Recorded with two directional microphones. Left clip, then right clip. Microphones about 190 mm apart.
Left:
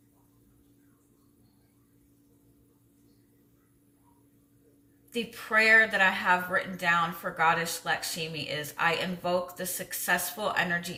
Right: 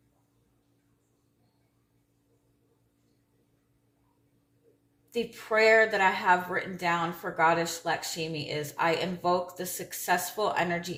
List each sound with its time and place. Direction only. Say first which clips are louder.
5.1 s speech: left 1 dB; 20° right (ahead or behind)